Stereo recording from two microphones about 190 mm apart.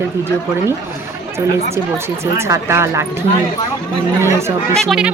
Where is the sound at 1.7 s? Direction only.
15° right (ahead or behind).